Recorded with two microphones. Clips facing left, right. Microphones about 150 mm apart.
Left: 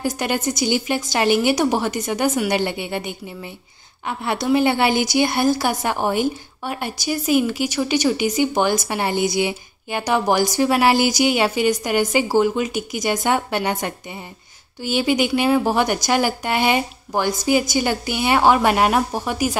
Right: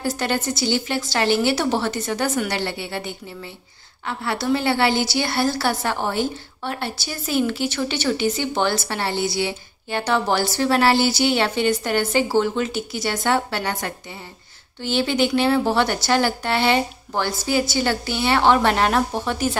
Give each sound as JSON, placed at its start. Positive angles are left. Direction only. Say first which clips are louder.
{"t": 0.0, "sound": "a woman's voice", "louder": "left 1 dB", "side_deg": 15}